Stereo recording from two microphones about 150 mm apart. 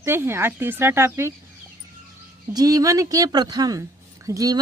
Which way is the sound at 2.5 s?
25° right (ahead or behind).